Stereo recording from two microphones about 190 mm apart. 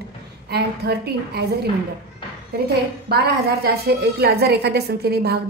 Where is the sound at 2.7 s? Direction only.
55° right (ahead or behind).